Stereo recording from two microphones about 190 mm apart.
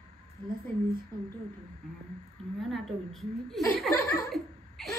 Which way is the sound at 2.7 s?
Centre (ahead or behind).